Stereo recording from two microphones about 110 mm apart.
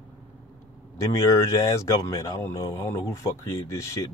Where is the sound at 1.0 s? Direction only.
30° left (ahead or behind).